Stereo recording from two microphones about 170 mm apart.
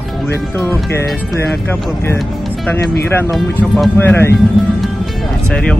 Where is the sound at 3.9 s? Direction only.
15° left (ahead or behind).